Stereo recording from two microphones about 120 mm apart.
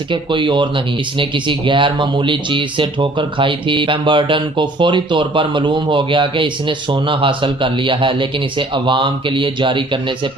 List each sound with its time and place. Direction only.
0.1 s speech: 45° right (ahead or behind)